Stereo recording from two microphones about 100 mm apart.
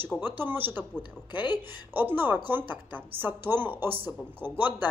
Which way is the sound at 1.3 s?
45° left (ahead or behind).